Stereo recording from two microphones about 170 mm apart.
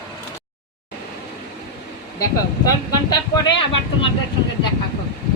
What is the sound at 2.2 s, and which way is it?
Speech, 20° left (ahead or behind).